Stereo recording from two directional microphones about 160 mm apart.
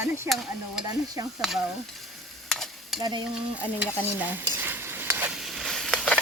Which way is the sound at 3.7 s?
10° right (ahead or behind).